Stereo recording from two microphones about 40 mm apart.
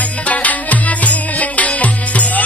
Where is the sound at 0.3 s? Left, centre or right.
Left.